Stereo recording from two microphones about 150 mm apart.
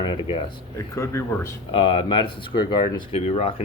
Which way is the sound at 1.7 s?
35° left (ahead or behind).